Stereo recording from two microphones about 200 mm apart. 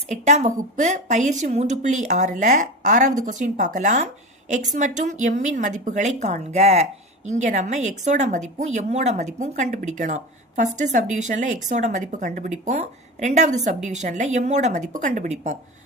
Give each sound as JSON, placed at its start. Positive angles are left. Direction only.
{"t": 0.1, "sound": "a woman's voice", "side_deg": -35}